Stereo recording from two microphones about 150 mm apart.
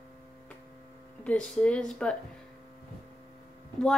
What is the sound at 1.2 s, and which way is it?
Speech, 10° left (ahead or behind).